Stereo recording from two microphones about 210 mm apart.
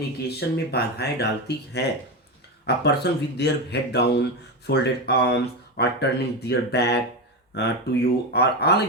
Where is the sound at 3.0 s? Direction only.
55° left (ahead or behind).